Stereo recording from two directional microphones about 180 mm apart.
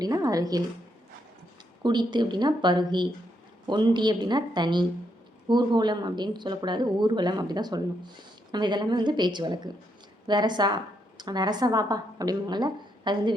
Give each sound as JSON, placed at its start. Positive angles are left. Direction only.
{"t": 0.0, "sound": "speech", "side_deg": -20}
{"t": 1.8, "sound": "speech", "side_deg": -25}